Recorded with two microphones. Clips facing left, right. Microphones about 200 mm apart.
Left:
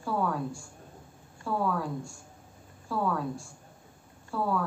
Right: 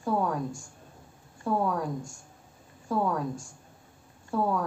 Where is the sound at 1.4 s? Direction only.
20° right (ahead or behind).